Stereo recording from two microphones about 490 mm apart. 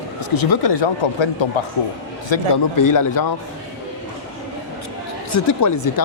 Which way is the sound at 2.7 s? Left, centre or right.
Left.